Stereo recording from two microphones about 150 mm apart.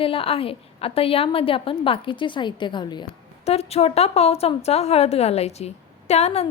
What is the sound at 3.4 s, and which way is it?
A woman's voice, 45° left (ahead or behind).